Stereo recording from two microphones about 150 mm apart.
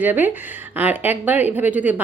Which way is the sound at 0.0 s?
10° right (ahead or behind).